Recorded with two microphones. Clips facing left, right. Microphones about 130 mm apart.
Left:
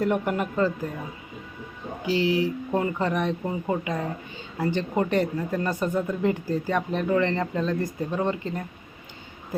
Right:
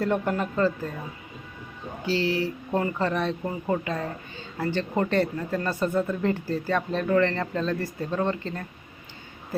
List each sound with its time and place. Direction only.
0.0 s speech: 15° left (ahead or behind)
2.0 s speech: 15° left (ahead or behind)